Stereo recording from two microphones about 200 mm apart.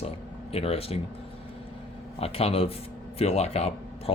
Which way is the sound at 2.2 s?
30° left (ahead or behind).